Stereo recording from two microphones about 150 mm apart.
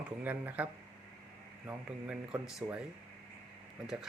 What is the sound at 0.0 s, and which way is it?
Speech, 10° right (ahead or behind).